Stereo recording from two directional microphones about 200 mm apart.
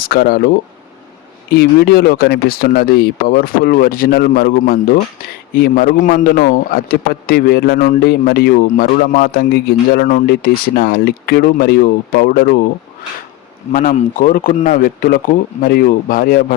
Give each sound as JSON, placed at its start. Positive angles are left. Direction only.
{"t": 0.0, "sound": "speech", "side_deg": 50}
{"t": 13.7, "sound": "speech", "side_deg": 40}